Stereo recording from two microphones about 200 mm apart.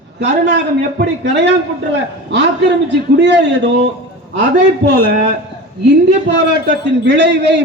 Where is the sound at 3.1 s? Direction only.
60° right (ahead or behind).